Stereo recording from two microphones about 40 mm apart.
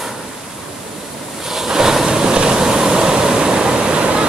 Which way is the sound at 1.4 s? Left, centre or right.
Centre.